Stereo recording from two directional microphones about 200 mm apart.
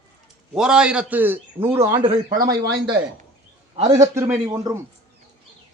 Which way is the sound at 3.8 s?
15° right (ahead or behind).